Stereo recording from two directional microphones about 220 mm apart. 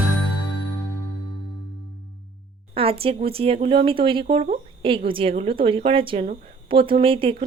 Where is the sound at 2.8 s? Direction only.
25° right (ahead or behind).